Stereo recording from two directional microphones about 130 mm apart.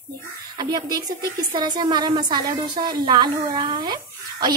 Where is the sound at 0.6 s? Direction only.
30° right (ahead or behind).